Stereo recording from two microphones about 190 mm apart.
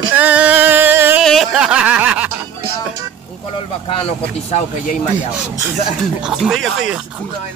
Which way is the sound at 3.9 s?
35° left (ahead or behind).